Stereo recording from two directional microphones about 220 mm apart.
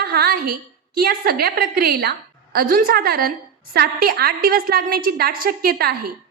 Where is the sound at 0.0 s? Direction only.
45° right (ahead or behind).